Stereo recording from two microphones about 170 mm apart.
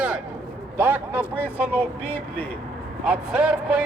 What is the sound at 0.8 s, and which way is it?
Speech, 10° right (ahead or behind).